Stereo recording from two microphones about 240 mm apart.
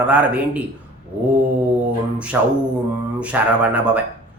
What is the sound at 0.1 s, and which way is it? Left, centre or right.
Speech, centre.